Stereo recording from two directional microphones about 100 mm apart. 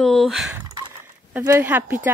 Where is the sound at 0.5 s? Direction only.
30° right (ahead or behind).